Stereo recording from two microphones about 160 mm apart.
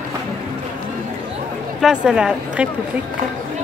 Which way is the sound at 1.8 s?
5° right (ahead or behind).